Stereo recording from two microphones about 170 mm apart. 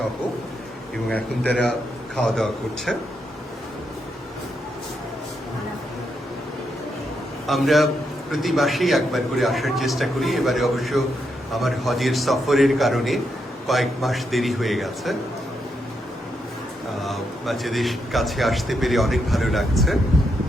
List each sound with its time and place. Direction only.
1.1 s a man's voice: 5° left (ahead or behind)
7.4 s a man's voice: centre (ahead or behind)
17.0 s speech: centre (ahead or behind)